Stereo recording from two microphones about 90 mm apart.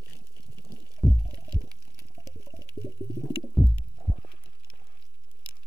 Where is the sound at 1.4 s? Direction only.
35° right (ahead or behind).